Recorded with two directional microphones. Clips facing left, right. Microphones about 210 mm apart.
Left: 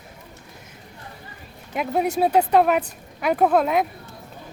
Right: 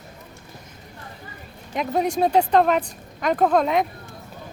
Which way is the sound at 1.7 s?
5° left (ahead or behind).